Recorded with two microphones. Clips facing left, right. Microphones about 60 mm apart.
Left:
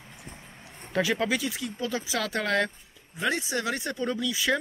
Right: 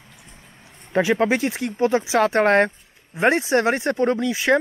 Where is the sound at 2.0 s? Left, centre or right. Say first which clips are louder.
Right 12 dB; right.